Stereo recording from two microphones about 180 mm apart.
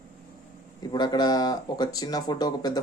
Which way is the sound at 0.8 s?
20° left (ahead or behind).